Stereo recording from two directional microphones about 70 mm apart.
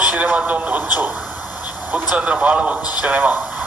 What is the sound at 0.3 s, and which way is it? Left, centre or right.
Speech, centre.